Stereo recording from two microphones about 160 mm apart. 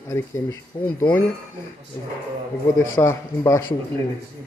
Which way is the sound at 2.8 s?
15° left (ahead or behind).